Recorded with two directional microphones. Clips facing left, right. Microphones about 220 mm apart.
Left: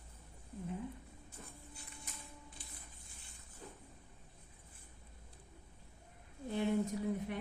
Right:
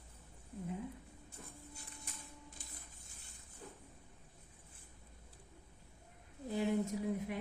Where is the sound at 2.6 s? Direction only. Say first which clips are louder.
Even; 45° right (ahead or behind).